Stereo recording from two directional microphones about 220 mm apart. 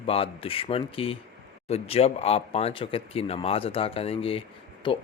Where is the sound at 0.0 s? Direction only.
25° left (ahead or behind).